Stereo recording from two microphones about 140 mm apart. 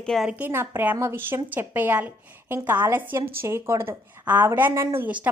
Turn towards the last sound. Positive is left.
turn(degrees=-15)  # may be behind; listen again after turning